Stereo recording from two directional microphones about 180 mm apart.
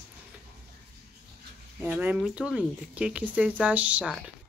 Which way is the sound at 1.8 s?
10° right (ahead or behind).